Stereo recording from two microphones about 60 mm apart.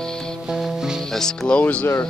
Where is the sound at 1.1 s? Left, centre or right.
Centre.